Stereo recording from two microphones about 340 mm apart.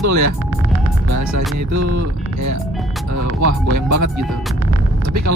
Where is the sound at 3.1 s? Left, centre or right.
Right.